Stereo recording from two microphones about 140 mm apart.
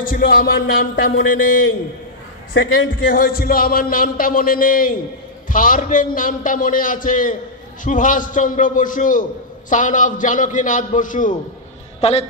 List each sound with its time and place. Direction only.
0.0 s speech: 90° left
3.1 s speech: 90° left
5.5 s a man's voice: 75° left (ahead or behind)
12.0 s a man's voice: 50° left (ahead or behind)